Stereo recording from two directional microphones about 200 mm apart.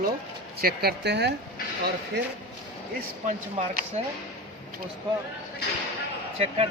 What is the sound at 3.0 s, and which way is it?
Speech, 40° right (ahead or behind).